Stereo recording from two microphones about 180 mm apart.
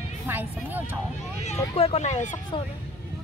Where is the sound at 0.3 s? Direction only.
10° right (ahead or behind).